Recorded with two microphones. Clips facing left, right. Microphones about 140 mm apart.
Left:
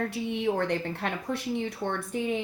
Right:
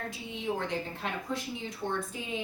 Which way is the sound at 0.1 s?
65° left (ahead or behind).